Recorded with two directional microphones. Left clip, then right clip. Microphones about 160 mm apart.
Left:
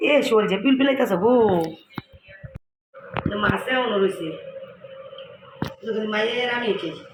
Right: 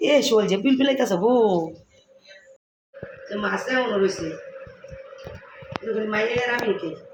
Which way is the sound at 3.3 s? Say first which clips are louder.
Left 1 dB; 15° right (ahead or behind).